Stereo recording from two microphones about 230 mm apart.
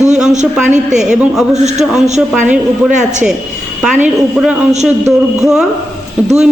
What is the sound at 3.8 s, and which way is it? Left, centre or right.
Speech, centre.